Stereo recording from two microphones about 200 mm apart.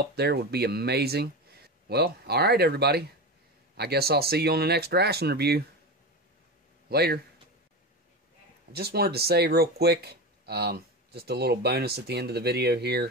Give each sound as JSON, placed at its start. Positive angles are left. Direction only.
{"t": 0.1, "sound": "speech", "side_deg": -55}
{"t": 6.9, "sound": "speech", "side_deg": -50}
{"t": 8.7, "sound": "speech", "side_deg": -50}